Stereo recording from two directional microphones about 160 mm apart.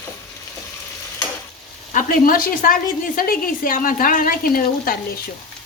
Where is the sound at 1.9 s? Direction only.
60° left (ahead or behind).